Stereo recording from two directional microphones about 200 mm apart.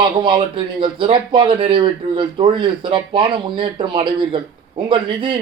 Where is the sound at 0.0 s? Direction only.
25° right (ahead or behind).